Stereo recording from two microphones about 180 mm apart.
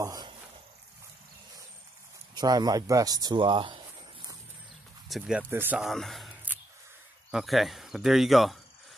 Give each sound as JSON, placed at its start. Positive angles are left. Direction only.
{"t": 0.0, "sound": "speech", "side_deg": -20}
{"t": 2.3, "sound": "speech", "side_deg": -20}
{"t": 5.0, "sound": "speech", "side_deg": 0}